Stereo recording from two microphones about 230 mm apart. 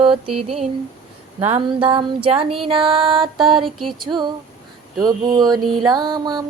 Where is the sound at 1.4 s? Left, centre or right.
Right.